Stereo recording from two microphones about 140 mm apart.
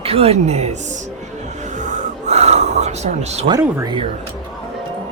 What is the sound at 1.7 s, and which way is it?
Gasp, 60° right (ahead or behind).